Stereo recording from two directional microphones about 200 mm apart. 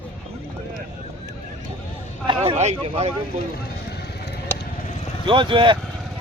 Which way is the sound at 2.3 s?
30° right (ahead or behind).